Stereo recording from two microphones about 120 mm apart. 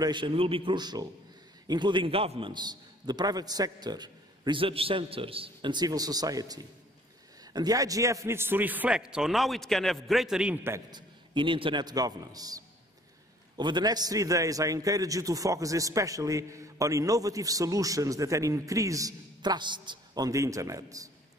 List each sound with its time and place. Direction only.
0.0 s a man's voice: 40° right (ahead or behind)
2.5 s a man's voice: 35° right (ahead or behind); by 10.6 s 5° right (ahead or behind)
10.9 s a man's voice: 40° right (ahead or behind)